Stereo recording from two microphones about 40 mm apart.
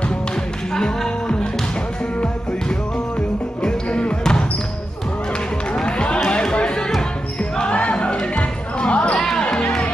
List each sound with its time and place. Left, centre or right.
0.7 s music: left
3.6 s basketball bounce: left
5.8 s run: left
7.5 s basketball bounce: left
9.4 s music: left